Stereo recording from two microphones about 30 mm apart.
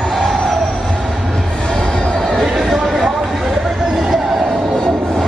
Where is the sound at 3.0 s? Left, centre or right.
Centre.